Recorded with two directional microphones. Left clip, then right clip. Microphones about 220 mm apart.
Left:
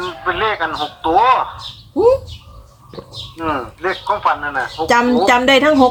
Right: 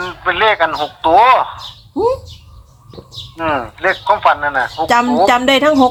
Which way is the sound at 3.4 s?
40° right (ahead or behind).